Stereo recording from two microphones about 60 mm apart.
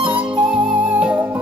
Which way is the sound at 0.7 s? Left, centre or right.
Right.